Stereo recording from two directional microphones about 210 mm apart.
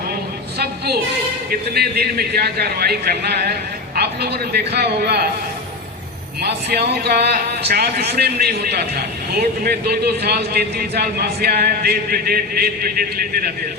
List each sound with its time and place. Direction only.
1.5 s a man's voice: 50° right (ahead or behind)
6.4 s a man's voice: 50° right (ahead or behind)